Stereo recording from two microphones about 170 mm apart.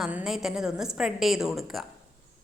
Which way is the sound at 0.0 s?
5° right (ahead or behind).